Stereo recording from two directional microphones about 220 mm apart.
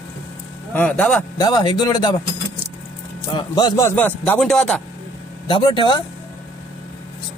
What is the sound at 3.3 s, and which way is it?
A man's voice, 20° left (ahead or behind).